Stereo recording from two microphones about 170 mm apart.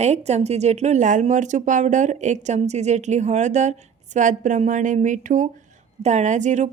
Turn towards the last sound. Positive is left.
turn(degrees=-45)  # may be behind; listen again after turning